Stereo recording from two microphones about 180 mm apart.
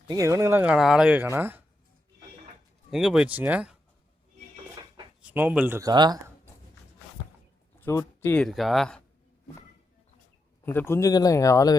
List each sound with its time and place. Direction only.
0.1 s speech: 15° right (ahead or behind)
2.9 s speech: centre (ahead or behind)
5.2 s speech: 10° right (ahead or behind)
5.9 s speech: 25° right (ahead or behind)
7.8 s speech: 15° left (ahead or behind)
8.4 s speech: centre (ahead or behind)
10.7 s speech: 10° left (ahead or behind)